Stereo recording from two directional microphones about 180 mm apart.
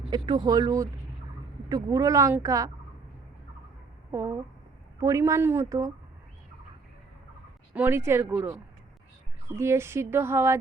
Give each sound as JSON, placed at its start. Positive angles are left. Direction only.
{"t": 0.1, "sound": "a woman's voice", "side_deg": -25}
{"t": 4.1, "sound": "speech", "side_deg": -15}
{"t": 7.7, "sound": "speech", "side_deg": -10}